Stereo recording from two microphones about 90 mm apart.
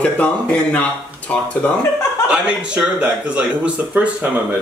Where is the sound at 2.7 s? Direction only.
15° right (ahead or behind).